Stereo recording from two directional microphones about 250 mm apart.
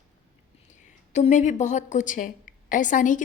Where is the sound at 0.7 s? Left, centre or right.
Left.